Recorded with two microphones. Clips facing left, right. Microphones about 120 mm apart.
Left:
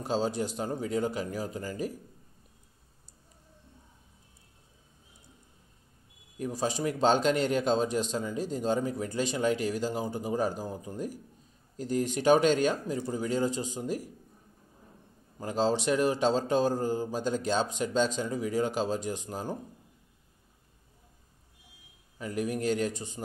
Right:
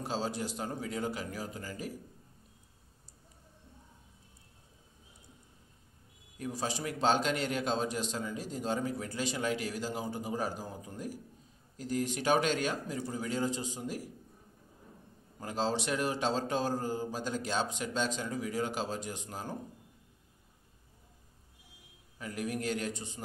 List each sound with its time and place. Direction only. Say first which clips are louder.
0.1 s speech: left 7 dB; 20° left (ahead or behind)
6.5 s speech: left 6 dB; 15° left (ahead or behind)
15.3 s speech: left 5 dB; 20° left (ahead or behind)
22.2 s speech: left 5 dB; 25° left (ahead or behind)